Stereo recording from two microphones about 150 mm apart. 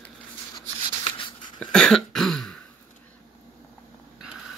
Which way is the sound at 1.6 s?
5° left (ahead or behind).